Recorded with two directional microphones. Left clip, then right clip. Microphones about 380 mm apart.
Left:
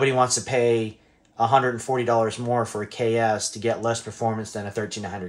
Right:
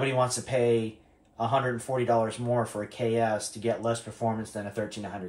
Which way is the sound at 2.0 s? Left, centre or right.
Left.